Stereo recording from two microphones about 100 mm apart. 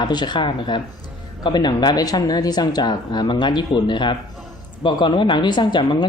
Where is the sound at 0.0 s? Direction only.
45° left (ahead or behind).